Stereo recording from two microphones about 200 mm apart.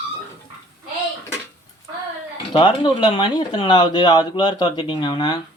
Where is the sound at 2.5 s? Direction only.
25° left (ahead or behind).